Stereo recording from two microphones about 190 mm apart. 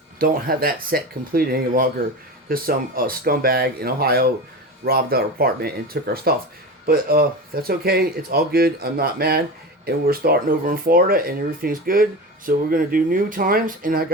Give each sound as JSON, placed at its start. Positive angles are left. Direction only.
{"t": 0.2, "sound": "speech", "side_deg": -50}